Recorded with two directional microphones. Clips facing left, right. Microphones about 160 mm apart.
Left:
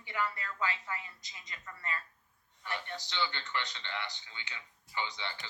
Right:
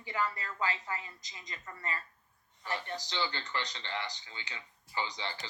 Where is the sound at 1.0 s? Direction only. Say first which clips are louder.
Right 3 dB; 25° right (ahead or behind).